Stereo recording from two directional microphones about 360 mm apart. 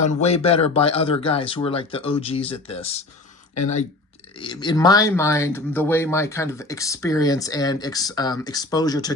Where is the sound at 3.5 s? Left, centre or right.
Left.